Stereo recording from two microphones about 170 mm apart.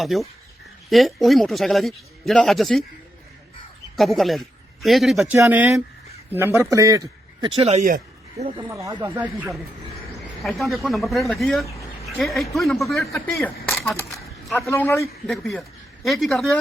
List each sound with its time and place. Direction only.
0.0 s a man's voice: centre (ahead or behind)
3.9 s a man's voice: centre (ahead or behind)
5.3 s a man's voice: 10° right (ahead or behind)
7.6 s speech: 40° right (ahead or behind)
8.6 s speech: 15° right (ahead or behind)
10.4 s a man's voice: centre (ahead or behind)
14.6 s a man's voice: 15° left (ahead or behind)
16.0 s a man's voice: centre (ahead or behind)